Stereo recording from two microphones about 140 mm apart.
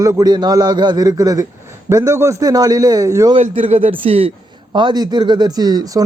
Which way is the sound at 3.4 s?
50° right (ahead or behind).